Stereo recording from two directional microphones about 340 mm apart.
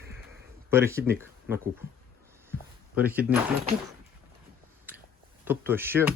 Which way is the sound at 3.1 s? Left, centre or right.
Centre.